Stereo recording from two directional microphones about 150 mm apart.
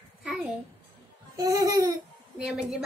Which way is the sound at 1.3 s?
20° right (ahead or behind).